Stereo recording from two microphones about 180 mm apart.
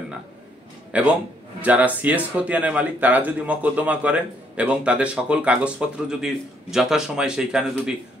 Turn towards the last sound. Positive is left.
turn(degrees=-5)  # may be behind; listen again after turning